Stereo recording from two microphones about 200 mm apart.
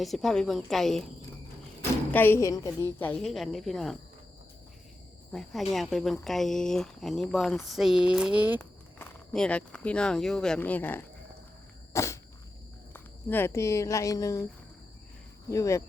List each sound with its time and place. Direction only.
0.0 s speech: centre (ahead or behind)
2.1 s speech: 10° left (ahead or behind)
5.3 s speech: centre (ahead or behind)
9.0 s speech: 5° left (ahead or behind)
11.9 s a sound: 15° left (ahead or behind)
12.9 s speech: 10° left (ahead or behind)
15.4 s speech: 15° left (ahead or behind)